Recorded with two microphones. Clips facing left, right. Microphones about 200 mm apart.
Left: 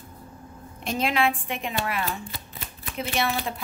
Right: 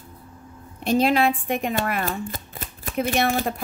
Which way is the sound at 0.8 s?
35° right (ahead or behind).